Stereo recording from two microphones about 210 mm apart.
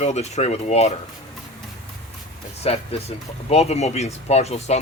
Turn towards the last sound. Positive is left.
turn(degrees=30)  # may be behind; listen again after turning